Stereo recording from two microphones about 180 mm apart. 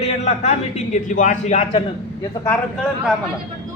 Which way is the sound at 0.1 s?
35° left (ahead or behind).